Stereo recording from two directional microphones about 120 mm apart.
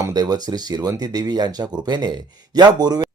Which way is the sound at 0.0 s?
35° right (ahead or behind).